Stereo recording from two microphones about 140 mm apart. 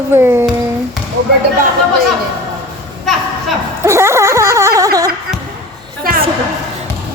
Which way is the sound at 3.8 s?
20° right (ahead or behind).